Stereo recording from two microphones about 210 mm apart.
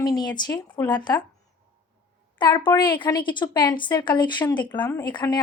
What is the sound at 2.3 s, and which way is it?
Speech, 20° left (ahead or behind).